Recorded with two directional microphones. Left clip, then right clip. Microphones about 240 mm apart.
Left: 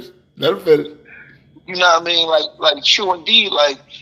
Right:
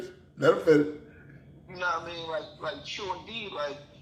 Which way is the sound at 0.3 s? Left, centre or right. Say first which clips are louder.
Left 7 dB; left.